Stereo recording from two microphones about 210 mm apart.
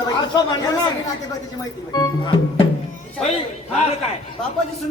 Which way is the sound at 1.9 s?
20° left (ahead or behind).